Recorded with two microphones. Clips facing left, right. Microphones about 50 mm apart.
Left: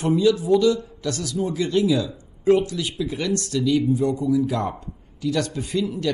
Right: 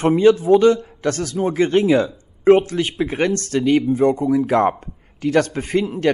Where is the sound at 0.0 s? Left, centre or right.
Right.